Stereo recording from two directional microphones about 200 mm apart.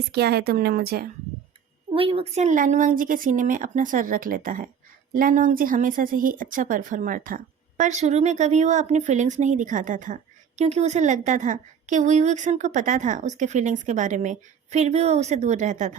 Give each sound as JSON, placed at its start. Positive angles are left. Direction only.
{"t": 0.1, "sound": "a woman's voice", "side_deg": -55}
{"t": 1.9, "sound": "a woman's voice", "side_deg": -25}